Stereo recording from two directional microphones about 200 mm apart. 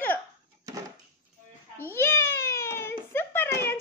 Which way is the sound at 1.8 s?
10° left (ahead or behind).